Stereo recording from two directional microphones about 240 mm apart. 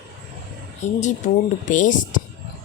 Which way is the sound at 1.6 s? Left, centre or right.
Left.